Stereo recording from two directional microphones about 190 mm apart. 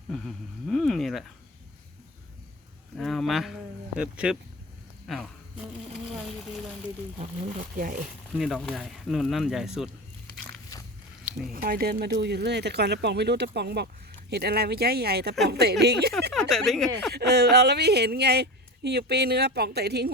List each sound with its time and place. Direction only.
0.1 s speech: centre (ahead or behind)
3.0 s speech: centre (ahead or behind)
5.0 s a sound: centre (ahead or behind)
7.8 s speech: 45° right (ahead or behind)
8.4 s speech: centre (ahead or behind)
10.7 s pig: 20° left (ahead or behind)
11.5 s speech: 50° right (ahead or behind)
16.3 s speech: centre (ahead or behind)
17.1 s speech: 60° right (ahead or behind)